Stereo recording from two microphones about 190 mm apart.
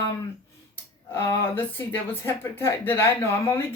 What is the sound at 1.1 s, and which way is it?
Speech, 10° left (ahead or behind).